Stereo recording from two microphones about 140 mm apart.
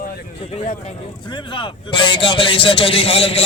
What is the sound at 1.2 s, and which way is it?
Speech, 35° left (ahead or behind).